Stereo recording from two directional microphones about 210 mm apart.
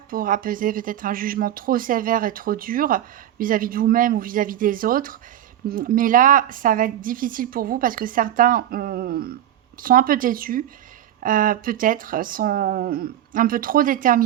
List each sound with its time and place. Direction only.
0.1 s speech: 40° right (ahead or behind)